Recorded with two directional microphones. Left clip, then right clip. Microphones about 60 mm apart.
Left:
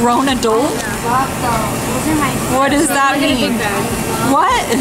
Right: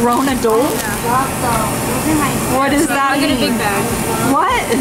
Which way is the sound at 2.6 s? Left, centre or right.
Left.